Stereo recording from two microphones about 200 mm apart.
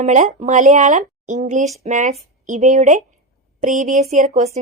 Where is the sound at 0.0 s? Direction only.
35° right (ahead or behind).